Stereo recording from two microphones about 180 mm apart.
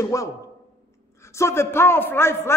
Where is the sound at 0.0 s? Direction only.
20° left (ahead or behind).